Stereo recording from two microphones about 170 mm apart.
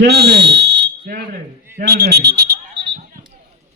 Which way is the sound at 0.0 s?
75° right (ahead or behind).